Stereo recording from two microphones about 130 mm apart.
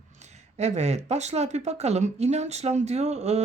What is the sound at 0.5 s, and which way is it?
Speech, 60° right (ahead or behind).